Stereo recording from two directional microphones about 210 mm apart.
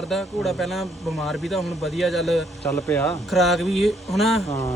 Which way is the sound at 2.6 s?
15° left (ahead or behind).